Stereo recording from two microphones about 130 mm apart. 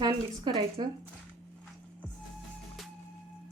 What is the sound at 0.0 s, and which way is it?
Speech, 35° right (ahead or behind).